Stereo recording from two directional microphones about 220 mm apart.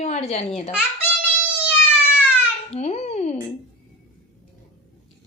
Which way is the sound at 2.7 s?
30° left (ahead or behind).